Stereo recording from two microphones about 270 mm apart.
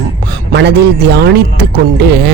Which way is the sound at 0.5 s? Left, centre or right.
Right.